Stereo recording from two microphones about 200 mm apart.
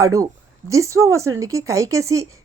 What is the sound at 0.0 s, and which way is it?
Speech, 15° right (ahead or behind).